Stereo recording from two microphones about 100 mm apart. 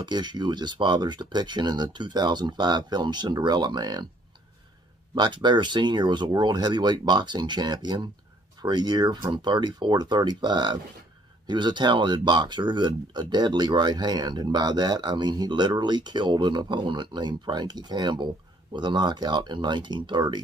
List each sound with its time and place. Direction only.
0.0 s speech: 50° right (ahead or behind)
5.1 s speech: 50° right (ahead or behind)